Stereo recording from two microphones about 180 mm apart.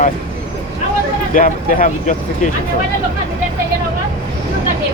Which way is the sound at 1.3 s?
45° left (ahead or behind).